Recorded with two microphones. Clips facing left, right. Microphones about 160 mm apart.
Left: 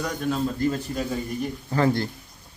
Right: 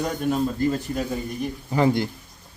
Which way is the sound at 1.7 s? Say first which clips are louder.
Right 2 dB; 15° right (ahead or behind).